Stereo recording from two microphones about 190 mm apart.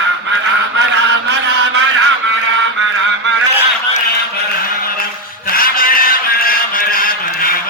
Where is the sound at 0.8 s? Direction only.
65° right (ahead or behind).